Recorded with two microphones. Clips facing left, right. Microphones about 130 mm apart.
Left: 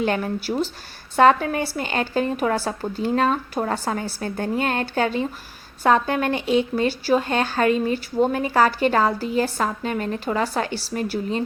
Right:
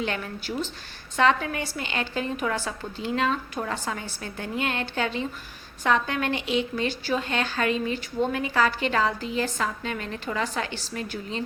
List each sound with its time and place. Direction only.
0.0 s a woman's voice: 45° left (ahead or behind)